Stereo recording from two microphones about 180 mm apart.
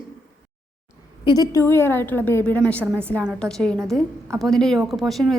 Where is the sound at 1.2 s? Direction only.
20° left (ahead or behind).